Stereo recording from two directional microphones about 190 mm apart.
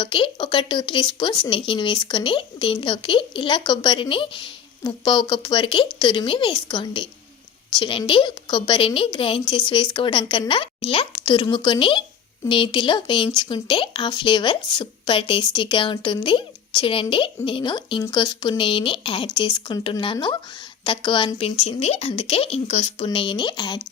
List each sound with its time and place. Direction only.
0.0 s speech: 25° left (ahead or behind)